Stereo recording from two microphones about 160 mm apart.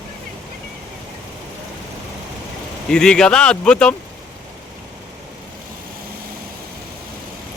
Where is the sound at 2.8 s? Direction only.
5° left (ahead or behind).